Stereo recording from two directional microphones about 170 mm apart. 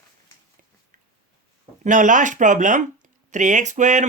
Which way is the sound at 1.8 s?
50° right (ahead or behind).